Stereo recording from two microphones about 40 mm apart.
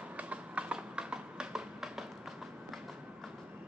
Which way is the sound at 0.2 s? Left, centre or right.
Right.